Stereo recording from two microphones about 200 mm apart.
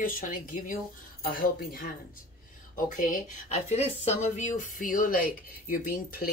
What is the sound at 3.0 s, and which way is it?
Speech, 40° left (ahead or behind).